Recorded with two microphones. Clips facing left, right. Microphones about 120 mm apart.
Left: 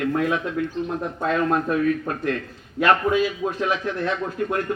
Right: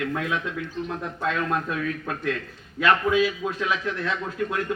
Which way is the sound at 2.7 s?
45° left (ahead or behind).